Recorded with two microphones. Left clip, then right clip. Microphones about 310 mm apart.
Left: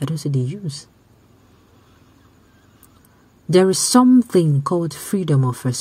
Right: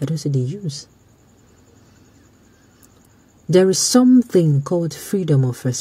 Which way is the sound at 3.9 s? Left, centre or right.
Centre.